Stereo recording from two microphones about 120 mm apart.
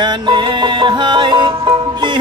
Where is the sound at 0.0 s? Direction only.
40° right (ahead or behind).